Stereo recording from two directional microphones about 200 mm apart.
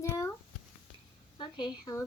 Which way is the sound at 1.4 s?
20° left (ahead or behind).